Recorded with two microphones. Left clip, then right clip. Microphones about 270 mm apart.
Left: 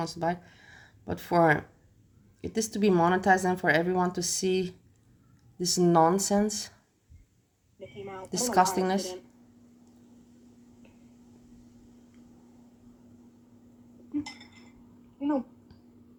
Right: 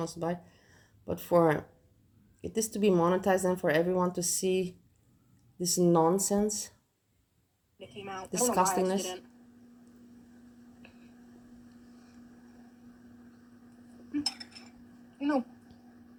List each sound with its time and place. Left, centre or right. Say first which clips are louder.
0.0 s speech: left 4 dB; left
8.3 s speech: left 3 dB; left